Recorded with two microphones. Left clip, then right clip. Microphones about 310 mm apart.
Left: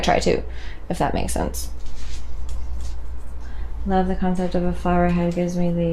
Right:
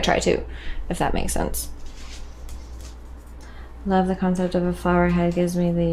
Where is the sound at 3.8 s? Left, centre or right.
Left.